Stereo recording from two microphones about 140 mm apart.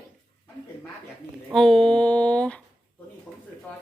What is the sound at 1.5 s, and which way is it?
Speech, 5° left (ahead or behind).